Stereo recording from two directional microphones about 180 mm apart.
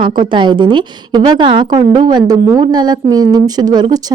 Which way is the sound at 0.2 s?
25° right (ahead or behind).